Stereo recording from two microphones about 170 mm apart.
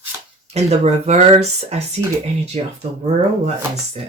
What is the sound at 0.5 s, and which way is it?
Speech, 40° right (ahead or behind).